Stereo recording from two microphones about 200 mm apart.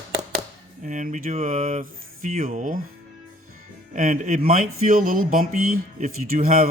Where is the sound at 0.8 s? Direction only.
40° right (ahead or behind).